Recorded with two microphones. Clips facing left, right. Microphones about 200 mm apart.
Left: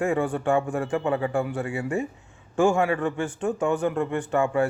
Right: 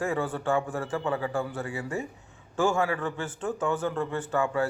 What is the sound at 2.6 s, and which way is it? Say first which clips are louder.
Speech: left 5 dB; 15° left (ahead or behind).